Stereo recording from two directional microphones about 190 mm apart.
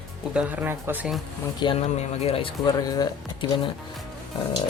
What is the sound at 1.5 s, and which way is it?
Speech, 25° left (ahead or behind).